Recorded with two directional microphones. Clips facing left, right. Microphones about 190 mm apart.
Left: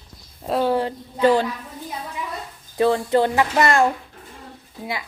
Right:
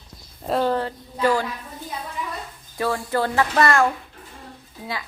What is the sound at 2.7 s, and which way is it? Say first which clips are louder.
A child's voice: left 6 dB; 25° left (ahead or behind).